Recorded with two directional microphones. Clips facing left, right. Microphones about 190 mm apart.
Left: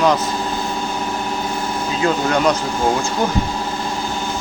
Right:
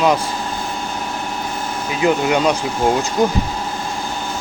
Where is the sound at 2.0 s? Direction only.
15° right (ahead or behind).